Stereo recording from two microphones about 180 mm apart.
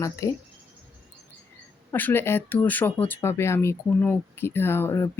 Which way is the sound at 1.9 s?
10° left (ahead or behind).